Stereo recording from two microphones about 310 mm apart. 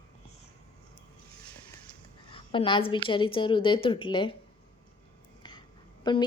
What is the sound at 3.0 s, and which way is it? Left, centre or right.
Speech, centre.